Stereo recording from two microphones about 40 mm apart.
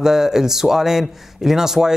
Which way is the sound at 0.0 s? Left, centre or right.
Centre.